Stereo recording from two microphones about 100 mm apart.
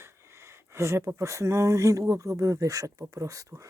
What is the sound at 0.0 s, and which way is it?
Speech, 25° right (ahead or behind).